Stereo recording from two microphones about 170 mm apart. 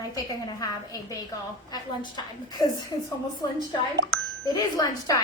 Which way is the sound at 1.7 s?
25° left (ahead or behind).